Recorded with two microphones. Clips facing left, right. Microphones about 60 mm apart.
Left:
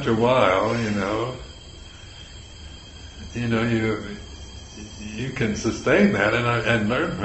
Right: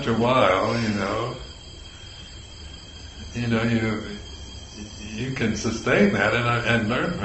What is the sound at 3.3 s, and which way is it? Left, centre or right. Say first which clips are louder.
A man's voice: even; centre.